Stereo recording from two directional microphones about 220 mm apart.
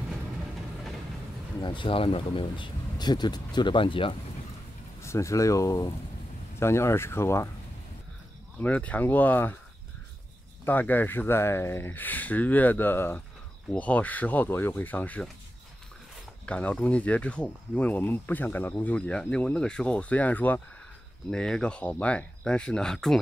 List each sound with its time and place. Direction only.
0.1 s vehicle: centre (ahead or behind)
1.6 s speech: 20° left (ahead or behind)
5.0 s speech: 15° left (ahead or behind)
8.5 s speech: 5° left (ahead or behind)
10.6 s speech: 10° left (ahead or behind)
16.4 s speech: 5° left (ahead or behind)